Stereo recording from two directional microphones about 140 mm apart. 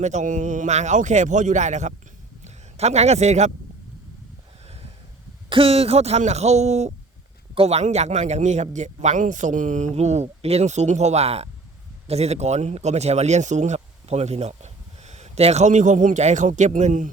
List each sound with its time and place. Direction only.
0.0 s a man's voice: 60° right (ahead or behind)
5.5 s speech: 40° right (ahead or behind); by 17.1 s 65° right (ahead or behind)